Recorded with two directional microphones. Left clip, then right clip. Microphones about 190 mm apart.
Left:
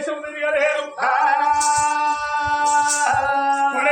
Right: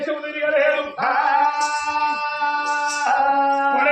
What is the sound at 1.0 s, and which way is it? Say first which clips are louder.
Music: left 1 dB; 10° left (ahead or behind).